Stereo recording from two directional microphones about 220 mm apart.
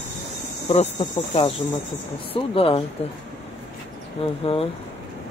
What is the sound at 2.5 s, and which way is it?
Speech, 25° left (ahead or behind).